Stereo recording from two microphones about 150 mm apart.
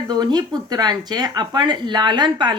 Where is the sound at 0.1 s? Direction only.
30° right (ahead or behind).